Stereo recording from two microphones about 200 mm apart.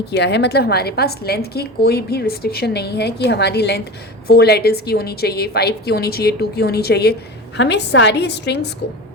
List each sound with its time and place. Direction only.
0.1 s a woman's voice: 55° left (ahead or behind)